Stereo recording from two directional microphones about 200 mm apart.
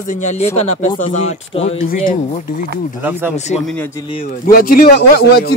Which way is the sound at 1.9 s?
45° left (ahead or behind).